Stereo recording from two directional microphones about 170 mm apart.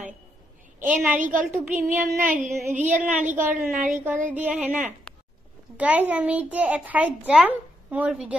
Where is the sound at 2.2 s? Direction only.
50° right (ahead or behind).